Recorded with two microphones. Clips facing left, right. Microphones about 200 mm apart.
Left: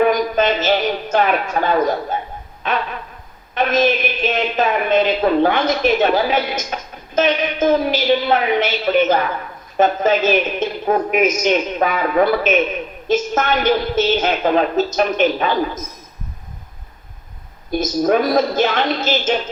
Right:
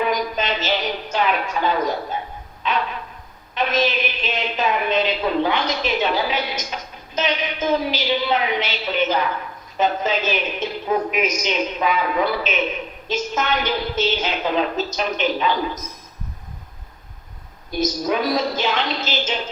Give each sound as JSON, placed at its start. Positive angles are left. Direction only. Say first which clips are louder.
{"t": 0.0, "sound": "a man's voice", "louder": "left 7 dB", "side_deg": 50}
{"t": 17.7, "sound": "a woman's voice", "louder": "left 5 dB", "side_deg": 50}